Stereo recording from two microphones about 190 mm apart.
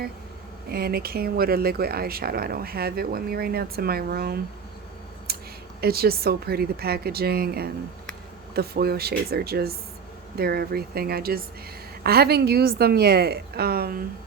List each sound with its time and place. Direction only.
0.7 s speech: 55° right (ahead or behind)
5.3 s a sound: 55° right (ahead or behind)
5.8 s a woman's voice: 55° right (ahead or behind)